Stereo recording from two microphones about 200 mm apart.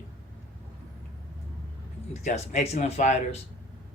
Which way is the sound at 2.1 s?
35° left (ahead or behind).